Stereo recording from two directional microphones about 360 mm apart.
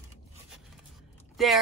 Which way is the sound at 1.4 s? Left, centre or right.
Centre.